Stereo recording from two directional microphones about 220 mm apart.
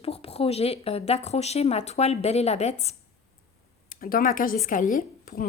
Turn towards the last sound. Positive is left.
turn(degrees=40)  # may be behind; listen again after turning